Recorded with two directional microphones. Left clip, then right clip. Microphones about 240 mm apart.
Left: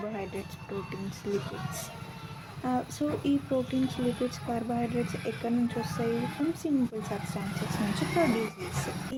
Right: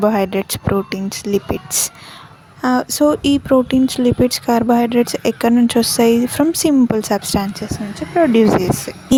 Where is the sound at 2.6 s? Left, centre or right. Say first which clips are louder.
Right 17 dB; right.